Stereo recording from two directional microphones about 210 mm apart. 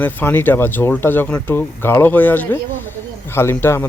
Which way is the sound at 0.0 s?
10° left (ahead or behind).